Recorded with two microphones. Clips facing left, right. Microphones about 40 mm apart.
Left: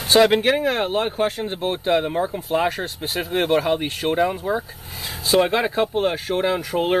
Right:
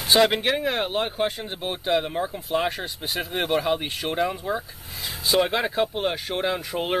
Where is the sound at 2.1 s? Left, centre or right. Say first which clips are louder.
Left 5 dB; centre.